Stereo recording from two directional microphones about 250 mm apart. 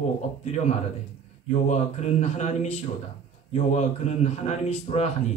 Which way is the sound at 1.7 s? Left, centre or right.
Left.